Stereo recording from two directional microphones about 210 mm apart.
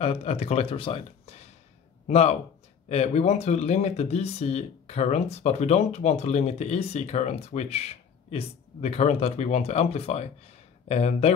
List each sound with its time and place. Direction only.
0.0 s a man's voice: 30° left (ahead or behind)